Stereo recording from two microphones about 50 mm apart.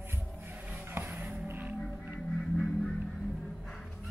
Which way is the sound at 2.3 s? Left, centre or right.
Centre.